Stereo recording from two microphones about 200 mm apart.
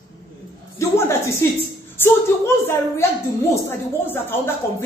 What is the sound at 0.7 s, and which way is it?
Music, 15° left (ahead or behind).